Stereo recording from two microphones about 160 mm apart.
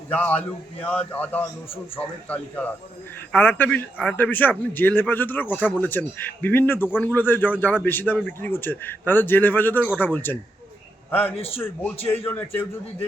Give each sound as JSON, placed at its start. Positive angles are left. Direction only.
{"t": 0.1, "sound": "a man's voice", "side_deg": 10}
{"t": 11.3, "sound": "a man's voice", "side_deg": 35}
{"t": 11.6, "sound": "a man's voice", "side_deg": 10}